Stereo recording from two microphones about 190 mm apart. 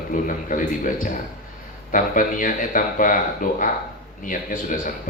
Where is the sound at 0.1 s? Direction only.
45° left (ahead or behind).